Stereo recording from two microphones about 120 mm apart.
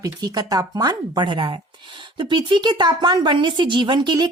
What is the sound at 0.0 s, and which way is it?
A woman's voice, 35° right (ahead or behind).